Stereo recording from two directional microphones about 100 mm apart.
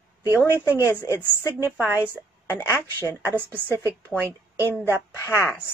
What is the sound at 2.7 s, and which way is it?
Speech, 20° left (ahead or behind).